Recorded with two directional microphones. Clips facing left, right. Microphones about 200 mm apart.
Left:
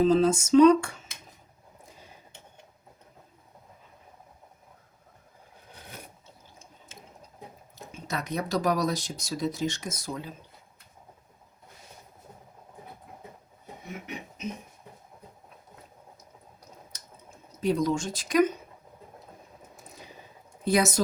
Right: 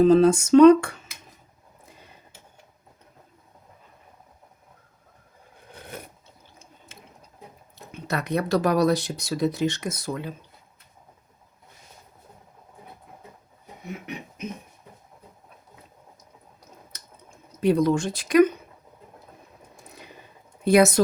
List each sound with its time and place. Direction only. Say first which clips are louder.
0.0 s speech: right 5 dB; 60° right (ahead or behind)
5.7 s a sound: right 6 dB; 55° right (ahead or behind)
7.9 s speech: right 6 dB; 65° right (ahead or behind)
17.6 s speech: right 5 dB; 60° right (ahead or behind)
20.7 s speech: right 7 dB; 60° right (ahead or behind)